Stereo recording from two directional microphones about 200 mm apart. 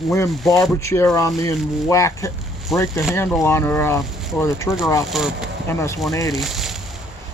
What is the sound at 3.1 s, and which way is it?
Speech, 15° left (ahead or behind).